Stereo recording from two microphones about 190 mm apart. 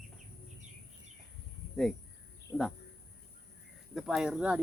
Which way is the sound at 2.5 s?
Centre (ahead or behind).